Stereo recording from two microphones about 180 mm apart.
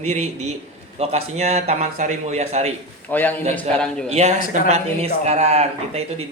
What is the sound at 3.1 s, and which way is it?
Speech, 10° left (ahead or behind).